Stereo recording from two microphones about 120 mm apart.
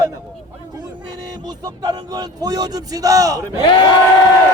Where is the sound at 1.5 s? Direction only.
30° right (ahead or behind).